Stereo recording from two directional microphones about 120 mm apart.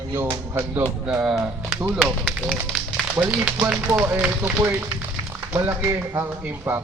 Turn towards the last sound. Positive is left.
turn(degrees=-20)  # may be behind; listen again after turning